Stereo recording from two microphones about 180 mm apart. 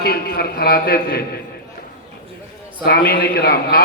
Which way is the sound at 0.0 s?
55° left (ahead or behind).